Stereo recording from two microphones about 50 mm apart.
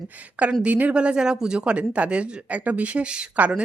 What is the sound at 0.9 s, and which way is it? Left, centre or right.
Speech, centre.